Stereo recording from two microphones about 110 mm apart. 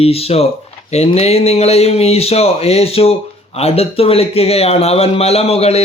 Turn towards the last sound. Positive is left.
turn(degrees=70)  # may be behind; listen again after turning